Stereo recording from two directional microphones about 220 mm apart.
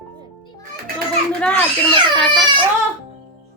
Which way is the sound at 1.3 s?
5° left (ahead or behind).